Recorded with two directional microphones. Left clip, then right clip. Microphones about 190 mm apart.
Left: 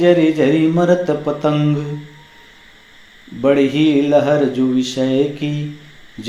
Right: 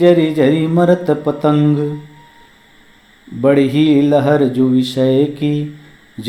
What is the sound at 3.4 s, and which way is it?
Mantra, 35° right (ahead or behind).